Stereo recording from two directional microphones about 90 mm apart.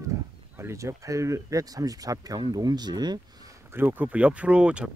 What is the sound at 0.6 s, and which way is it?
Speech, 30° right (ahead or behind).